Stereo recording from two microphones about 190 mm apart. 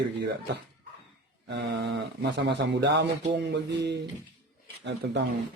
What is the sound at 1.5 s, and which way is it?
Speech, 65° right (ahead or behind).